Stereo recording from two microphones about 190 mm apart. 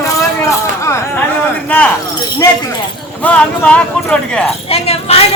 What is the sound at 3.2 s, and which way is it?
Speech, 5° left (ahead or behind).